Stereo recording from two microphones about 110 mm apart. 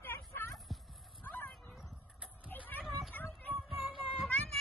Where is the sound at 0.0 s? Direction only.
20° left (ahead or behind).